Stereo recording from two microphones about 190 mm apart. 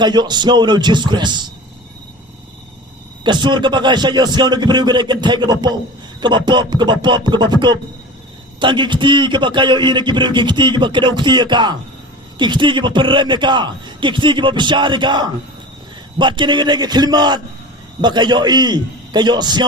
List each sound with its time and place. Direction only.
0.0 s a man's voice: 20° right (ahead or behind)
3.2 s a man's voice: 25° right (ahead or behind)